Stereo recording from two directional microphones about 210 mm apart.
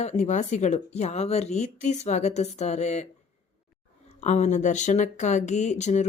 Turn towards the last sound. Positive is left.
turn(degrees=35)  # may be behind; listen again after turning